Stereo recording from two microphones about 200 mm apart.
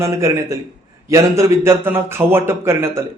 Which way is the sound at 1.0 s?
15° right (ahead or behind).